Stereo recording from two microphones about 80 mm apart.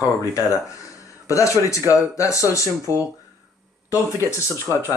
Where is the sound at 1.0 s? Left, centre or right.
Left.